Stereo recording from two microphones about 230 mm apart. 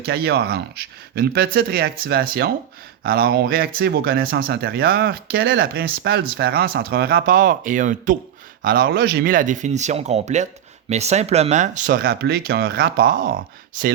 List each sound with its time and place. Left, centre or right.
0.0 s speech: right